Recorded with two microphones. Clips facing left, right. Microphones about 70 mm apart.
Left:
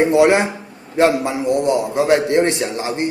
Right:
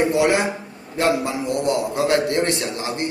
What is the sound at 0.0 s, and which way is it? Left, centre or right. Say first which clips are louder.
A man's voice: left 5 dB; left.